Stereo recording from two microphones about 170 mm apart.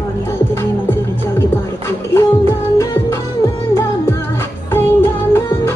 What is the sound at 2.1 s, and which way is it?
Music, 15° left (ahead or behind).